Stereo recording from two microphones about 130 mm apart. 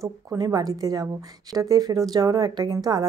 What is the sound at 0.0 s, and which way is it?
A woman's voice, 25° right (ahead or behind).